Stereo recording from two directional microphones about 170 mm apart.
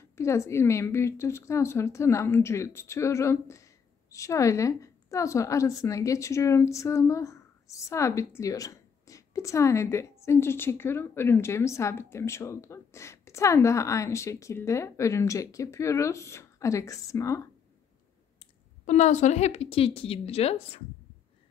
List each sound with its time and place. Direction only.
0.0 s a woman's voice: 15° left (ahead or behind)
18.9 s speech: 45° left (ahead or behind)